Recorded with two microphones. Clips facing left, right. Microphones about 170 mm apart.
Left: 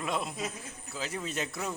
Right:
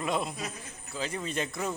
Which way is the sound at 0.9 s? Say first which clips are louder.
Right 2 dB; 5° left (ahead or behind).